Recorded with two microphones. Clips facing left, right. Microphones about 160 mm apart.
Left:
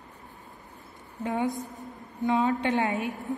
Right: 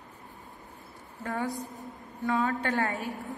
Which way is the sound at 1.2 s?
20° left (ahead or behind).